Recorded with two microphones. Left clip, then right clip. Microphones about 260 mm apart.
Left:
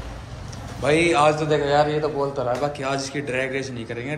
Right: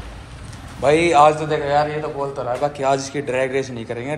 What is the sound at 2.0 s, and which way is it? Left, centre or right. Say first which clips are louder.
A man's voice: left 1 dB; centre.